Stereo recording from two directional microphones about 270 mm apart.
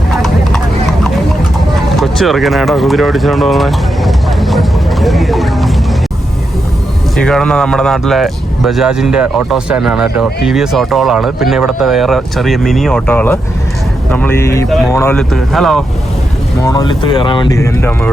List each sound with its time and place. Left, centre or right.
0.2 s clip-clop: centre
2.0 s a sound: centre
7.2 s speech: centre
16.6 s speech: centre